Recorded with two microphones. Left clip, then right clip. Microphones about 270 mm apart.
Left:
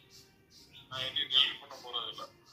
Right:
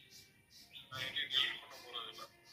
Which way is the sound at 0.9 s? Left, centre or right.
Centre.